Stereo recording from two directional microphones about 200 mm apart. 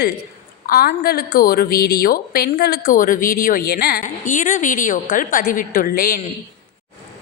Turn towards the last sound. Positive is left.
turn(degrees=50)  # may be behind; listen again after turning